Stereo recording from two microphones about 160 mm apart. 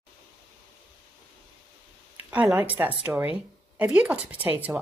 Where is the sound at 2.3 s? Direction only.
10° right (ahead or behind).